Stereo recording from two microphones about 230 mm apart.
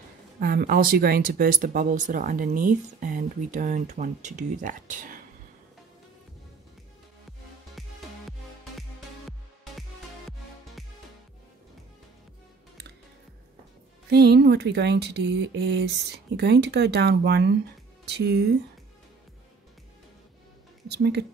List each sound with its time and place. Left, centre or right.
0.4 s speech: right
7.8 s music: centre
14.1 s speech: right
20.9 s speech: right